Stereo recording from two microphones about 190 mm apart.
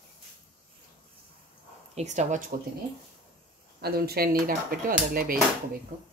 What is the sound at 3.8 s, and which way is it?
Speech, 55° right (ahead or behind).